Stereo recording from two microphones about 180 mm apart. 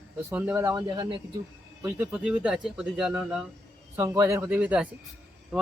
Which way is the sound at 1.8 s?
10° right (ahead or behind).